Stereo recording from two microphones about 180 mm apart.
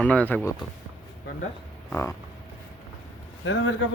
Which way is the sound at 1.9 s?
15° left (ahead or behind).